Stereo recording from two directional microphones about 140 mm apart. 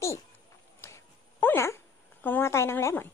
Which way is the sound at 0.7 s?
20° left (ahead or behind).